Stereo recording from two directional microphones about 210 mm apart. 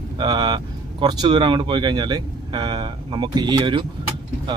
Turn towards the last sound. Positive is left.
turn(degrees=-25)  # may be behind; listen again after turning